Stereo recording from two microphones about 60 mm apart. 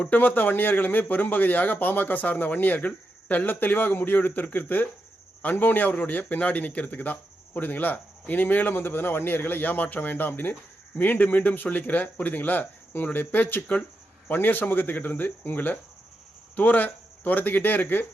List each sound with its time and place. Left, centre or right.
0.1 s speech: left